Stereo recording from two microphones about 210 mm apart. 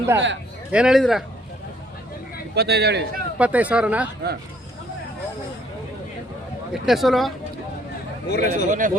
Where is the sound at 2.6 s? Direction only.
50° right (ahead or behind).